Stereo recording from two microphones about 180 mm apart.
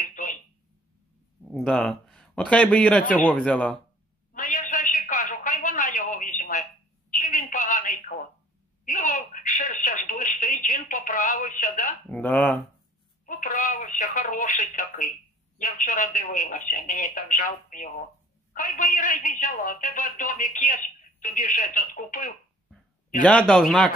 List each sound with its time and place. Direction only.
0.0 s telephone: 45° left (ahead or behind)
1.5 s speech: 5° left (ahead or behind)
4.3 s a sound: 45° left (ahead or behind)
7.1 s telephone: 50° left (ahead or behind)
12.1 s speech: 10° left (ahead or behind)
13.2 s speech: 45° left (ahead or behind)
23.2 s speech: 5° left (ahead or behind)